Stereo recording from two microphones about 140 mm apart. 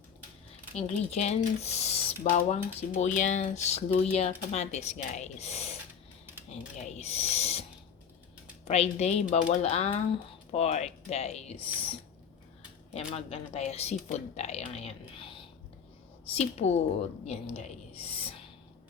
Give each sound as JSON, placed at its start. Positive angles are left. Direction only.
{"t": 0.8, "sound": "a woman's voice", "side_deg": 50}
{"t": 8.6, "sound": "a woman's voice", "side_deg": 50}
{"t": 12.9, "sound": "a woman's voice", "side_deg": 45}
{"t": 16.4, "sound": "a woman's voice", "side_deg": 50}